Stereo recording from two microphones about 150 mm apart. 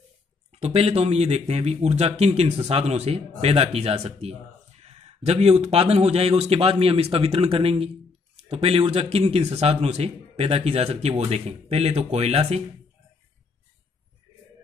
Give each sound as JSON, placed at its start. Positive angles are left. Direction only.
{"t": 0.5, "sound": "speech", "side_deg": -45}